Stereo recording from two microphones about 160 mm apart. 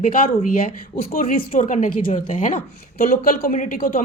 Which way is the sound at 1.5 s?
50° left (ahead or behind).